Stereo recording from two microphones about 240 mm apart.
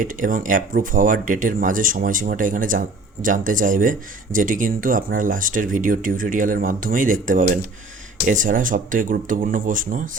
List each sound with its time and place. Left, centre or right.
0.0 s speech: right